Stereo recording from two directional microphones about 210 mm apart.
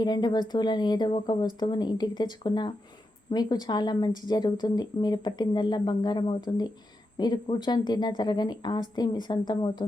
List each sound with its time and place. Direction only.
0.0 s a woman's voice: 20° left (ahead or behind)